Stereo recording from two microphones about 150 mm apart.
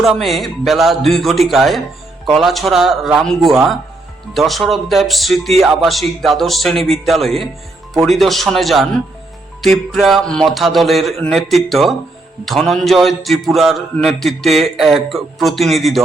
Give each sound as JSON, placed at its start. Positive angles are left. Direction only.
{"t": 0.0, "sound": "a man's voice", "side_deg": 0}